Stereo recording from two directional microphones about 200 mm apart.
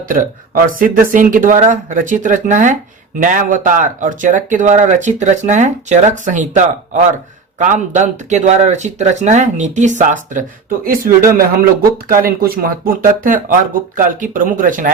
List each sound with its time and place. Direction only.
0.1 s speech: 45° right (ahead or behind)